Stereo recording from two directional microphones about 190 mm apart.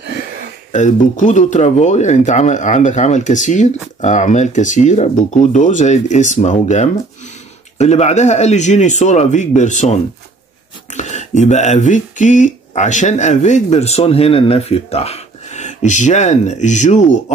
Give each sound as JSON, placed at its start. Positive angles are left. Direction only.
{"t": 0.7, "sound": "speech", "side_deg": 40}